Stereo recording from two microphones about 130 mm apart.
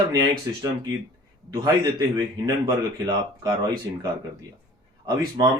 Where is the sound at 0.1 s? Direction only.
30° right (ahead or behind).